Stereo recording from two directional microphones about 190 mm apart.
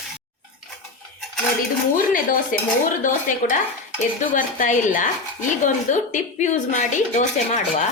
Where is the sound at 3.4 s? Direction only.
45° left (ahead or behind).